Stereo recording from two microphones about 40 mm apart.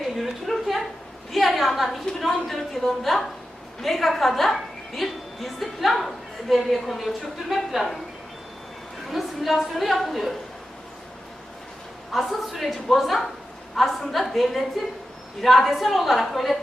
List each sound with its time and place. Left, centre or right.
0.2 s a sound: centre
1.3 s a woman's voice: centre
9.0 s a woman's voice: centre
12.1 s a woman's voice: centre